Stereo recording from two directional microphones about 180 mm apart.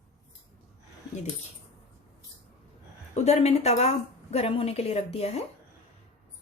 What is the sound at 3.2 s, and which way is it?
A woman's voice, 35° left (ahead or behind).